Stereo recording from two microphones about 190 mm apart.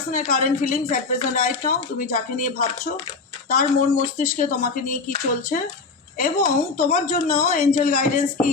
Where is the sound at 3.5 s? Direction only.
45° left (ahead or behind).